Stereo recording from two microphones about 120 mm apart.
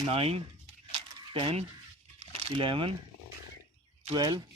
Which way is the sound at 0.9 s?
45° right (ahead or behind).